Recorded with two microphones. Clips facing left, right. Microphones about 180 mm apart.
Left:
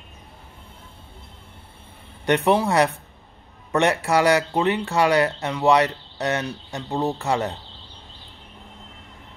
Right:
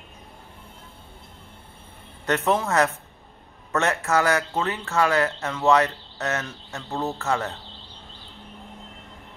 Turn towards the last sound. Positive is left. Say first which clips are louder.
# left 3 dB
turn(degrees=15)  # may be behind; listen again after turning